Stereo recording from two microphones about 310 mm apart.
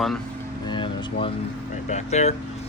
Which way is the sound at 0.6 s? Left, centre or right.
Centre.